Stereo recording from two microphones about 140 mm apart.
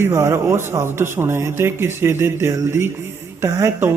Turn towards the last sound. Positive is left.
turn(degrees=-20)  # may be behind; listen again after turning